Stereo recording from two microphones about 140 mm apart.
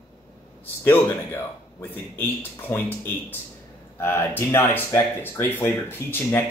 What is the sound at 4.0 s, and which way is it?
Speech, 15° left (ahead or behind).